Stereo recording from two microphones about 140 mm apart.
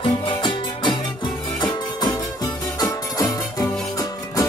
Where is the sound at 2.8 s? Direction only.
25° left (ahead or behind).